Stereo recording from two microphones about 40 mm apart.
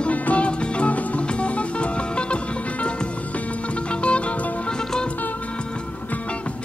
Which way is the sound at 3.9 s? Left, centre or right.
Left.